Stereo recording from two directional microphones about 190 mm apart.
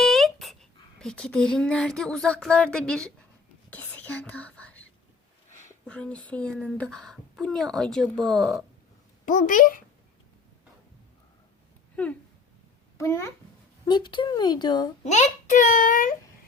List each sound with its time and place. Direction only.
0.0 s a child's voice: centre (ahead or behind)
3.7 s whispering: 10° left (ahead or behind)
5.8 s a woman's voice: 5° left (ahead or behind)
9.2 s a child's voice: 45° left (ahead or behind)
12.0 s a sound: 5° left (ahead or behind)
13.0 s speech: 15° left (ahead or behind)
15.0 s a child's voice: 40° left (ahead or behind)